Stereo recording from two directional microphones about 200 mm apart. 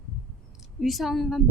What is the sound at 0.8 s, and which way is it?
Speech, centre (ahead or behind).